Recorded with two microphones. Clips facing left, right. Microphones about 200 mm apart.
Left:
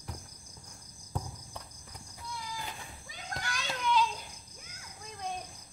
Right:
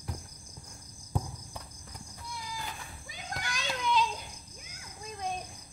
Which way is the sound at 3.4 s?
15° right (ahead or behind).